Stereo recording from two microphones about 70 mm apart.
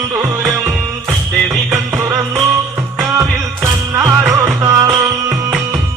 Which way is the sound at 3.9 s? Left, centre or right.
Right.